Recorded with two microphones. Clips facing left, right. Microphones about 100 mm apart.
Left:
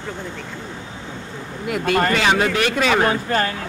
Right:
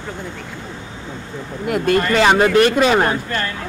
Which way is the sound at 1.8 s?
50° left (ahead or behind).